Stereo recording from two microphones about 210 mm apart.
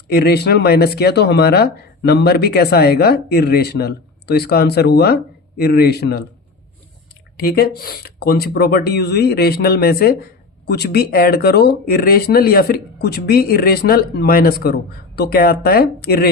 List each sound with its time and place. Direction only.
0.1 s speech: 50° left (ahead or behind)